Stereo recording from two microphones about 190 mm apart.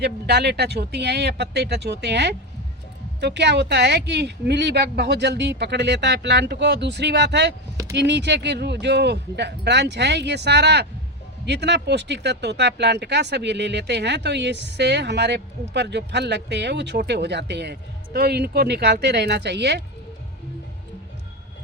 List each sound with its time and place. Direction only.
0.0 s speech: 60° right (ahead or behind)